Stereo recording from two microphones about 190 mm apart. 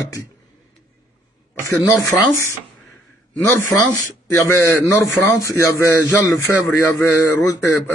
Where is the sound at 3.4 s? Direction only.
15° left (ahead or behind).